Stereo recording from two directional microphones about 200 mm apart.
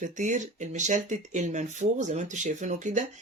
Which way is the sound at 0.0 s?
40° right (ahead or behind).